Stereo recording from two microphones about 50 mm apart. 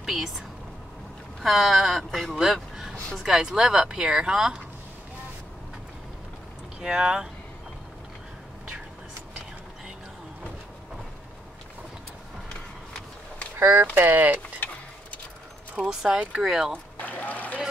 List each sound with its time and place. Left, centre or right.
0.0 s a sound: centre
1.4 s speech: centre
6.8 s speech: centre
13.9 s speech: right
14.6 s a sound: left
15.9 s speech: centre
16.2 s speech: right
16.4 s speech: centre
17.0 s a sound: left